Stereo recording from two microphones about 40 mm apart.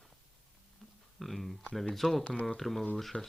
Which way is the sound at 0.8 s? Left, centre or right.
Centre.